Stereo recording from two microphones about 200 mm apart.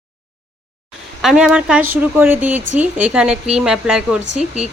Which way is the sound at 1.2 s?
Centre (ahead or behind).